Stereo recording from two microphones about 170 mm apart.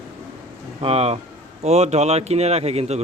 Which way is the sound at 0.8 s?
35° right (ahead or behind).